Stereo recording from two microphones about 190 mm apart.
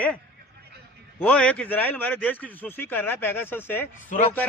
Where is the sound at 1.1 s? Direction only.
5° left (ahead or behind).